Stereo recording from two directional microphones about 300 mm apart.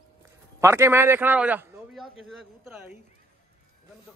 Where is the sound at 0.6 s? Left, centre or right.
Centre.